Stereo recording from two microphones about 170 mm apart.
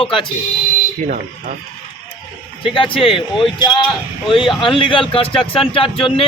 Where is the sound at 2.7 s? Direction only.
30° left (ahead or behind).